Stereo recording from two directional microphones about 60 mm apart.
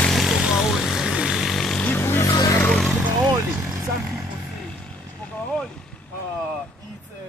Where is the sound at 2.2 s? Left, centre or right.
Left.